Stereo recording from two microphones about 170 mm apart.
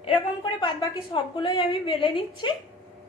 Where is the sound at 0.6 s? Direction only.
25° left (ahead or behind).